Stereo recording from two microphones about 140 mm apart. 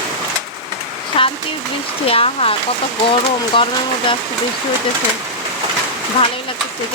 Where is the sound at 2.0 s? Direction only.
45° left (ahead or behind).